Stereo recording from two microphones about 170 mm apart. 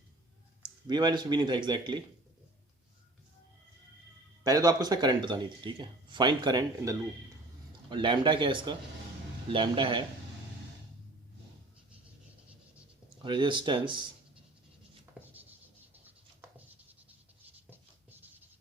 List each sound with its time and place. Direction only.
0.6 s speech: 25° right (ahead or behind)
4.4 s speech: 20° right (ahead or behind)
13.2 s speech: 30° right (ahead or behind)
15.2 s writing: 10° right (ahead or behind)
17.7 s writing: 10° right (ahead or behind)